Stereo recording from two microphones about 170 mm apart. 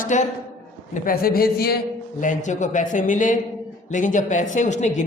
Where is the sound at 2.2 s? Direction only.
45° left (ahead or behind).